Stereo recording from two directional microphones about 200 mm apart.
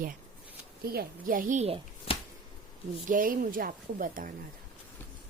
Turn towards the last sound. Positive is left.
turn(degrees=-40)  # may be behind; listen again after turning